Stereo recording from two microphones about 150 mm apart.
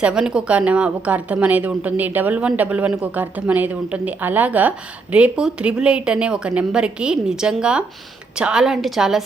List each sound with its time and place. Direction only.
0.0 s a woman's voice: 5° right (ahead or behind)